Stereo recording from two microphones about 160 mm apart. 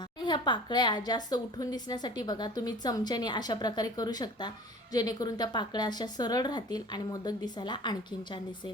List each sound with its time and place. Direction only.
0.3 s a woman's voice: 30° left (ahead or behind)